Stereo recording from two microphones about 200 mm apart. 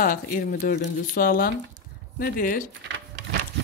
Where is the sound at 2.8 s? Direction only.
65° right (ahead or behind).